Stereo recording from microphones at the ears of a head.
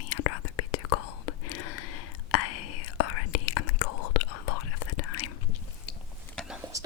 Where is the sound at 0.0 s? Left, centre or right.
Left.